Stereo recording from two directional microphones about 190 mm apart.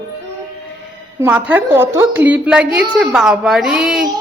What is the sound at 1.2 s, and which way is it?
A woman's voice, 10° right (ahead or behind).